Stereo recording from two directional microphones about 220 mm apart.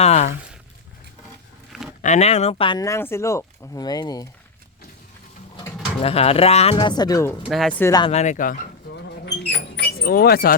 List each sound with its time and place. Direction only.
0.0 s a sound: 30° left (ahead or behind)
2.0 s speech: 30° left (ahead or behind)
5.5 s speech: 25° left (ahead or behind)
7.4 s speech: centre (ahead or behind)
7.8 s speech: 15° left (ahead or behind)
8.1 s speech: 30° left (ahead or behind)
9.2 s a sound: 50° left (ahead or behind)